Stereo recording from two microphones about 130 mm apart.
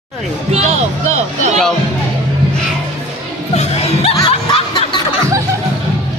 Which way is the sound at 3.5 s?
50° left (ahead or behind).